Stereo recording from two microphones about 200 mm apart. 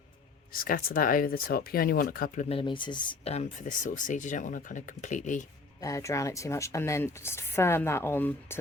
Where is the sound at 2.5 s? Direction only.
25° left (ahead or behind).